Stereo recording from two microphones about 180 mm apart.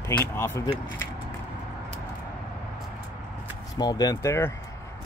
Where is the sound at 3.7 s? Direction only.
20° left (ahead or behind).